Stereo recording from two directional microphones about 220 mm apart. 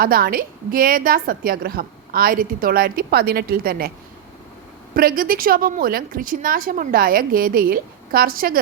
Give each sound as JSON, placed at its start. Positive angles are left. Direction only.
{"t": 0.0, "sound": "a woman's voice", "side_deg": -40}
{"t": 4.9, "sound": "a woman's voice", "side_deg": -40}